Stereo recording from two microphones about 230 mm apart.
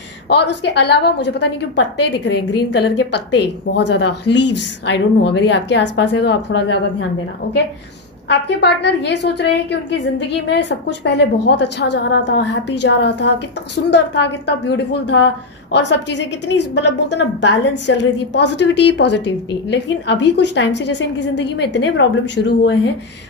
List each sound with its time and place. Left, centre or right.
0.3 s a woman's voice: left